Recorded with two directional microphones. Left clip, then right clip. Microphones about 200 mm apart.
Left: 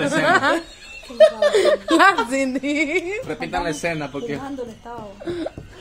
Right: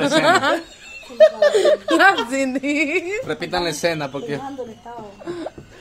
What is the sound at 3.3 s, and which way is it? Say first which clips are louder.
Speech: right 2 dB; 40° right (ahead or behind).